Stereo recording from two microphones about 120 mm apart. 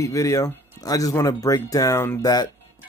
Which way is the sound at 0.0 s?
25° left (ahead or behind).